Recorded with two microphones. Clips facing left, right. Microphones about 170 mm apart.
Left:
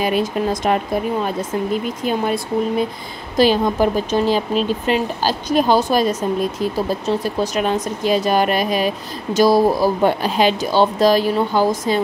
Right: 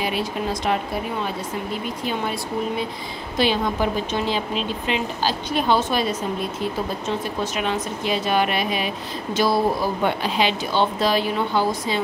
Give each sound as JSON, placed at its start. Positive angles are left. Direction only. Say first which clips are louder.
{"t": 0.0, "sound": "speech", "louder": "left 6 dB", "side_deg": 45}
{"t": 2.0, "sound": "a woman's voice", "louder": "left 6 dB", "side_deg": 50}